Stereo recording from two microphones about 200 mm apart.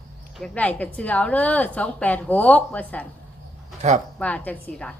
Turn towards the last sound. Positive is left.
turn(degrees=5)  # may be behind; listen again after turning